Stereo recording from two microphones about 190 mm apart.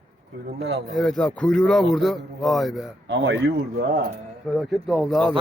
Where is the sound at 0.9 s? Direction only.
Centre (ahead or behind).